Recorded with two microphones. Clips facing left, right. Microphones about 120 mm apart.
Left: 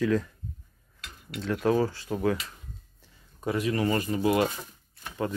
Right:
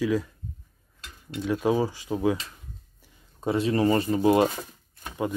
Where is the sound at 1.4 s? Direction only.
15° right (ahead or behind).